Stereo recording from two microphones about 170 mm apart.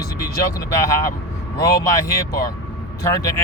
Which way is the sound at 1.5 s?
20° left (ahead or behind).